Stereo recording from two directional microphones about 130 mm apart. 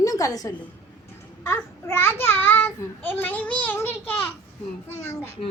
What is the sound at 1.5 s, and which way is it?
A child's voice, 20° left (ahead or behind).